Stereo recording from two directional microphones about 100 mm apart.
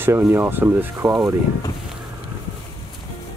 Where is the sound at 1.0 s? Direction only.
35° right (ahead or behind).